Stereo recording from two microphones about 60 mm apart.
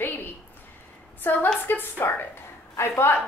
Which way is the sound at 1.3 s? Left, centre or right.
Left.